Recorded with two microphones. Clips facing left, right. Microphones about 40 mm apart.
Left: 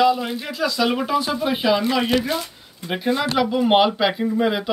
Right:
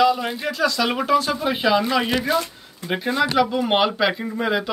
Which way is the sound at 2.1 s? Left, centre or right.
Right.